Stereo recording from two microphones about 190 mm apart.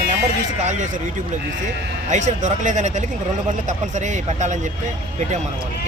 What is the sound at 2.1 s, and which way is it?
Speech, 40° right (ahead or behind).